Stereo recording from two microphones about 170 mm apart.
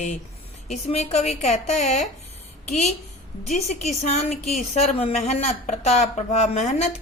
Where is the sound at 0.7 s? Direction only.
40° left (ahead or behind).